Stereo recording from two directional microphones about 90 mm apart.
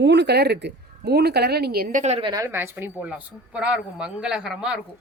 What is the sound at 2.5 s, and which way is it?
Speech, 25° right (ahead or behind).